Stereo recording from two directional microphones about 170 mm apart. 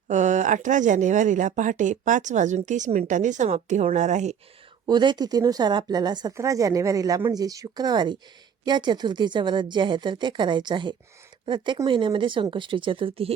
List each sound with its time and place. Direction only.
0.1 s speech: 45° right (ahead or behind)
4.9 s speech: 25° right (ahead or behind)